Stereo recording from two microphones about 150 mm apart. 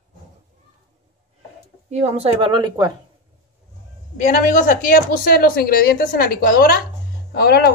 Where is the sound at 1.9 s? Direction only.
45° right (ahead or behind); by 2.9 s 25° right (ahead or behind).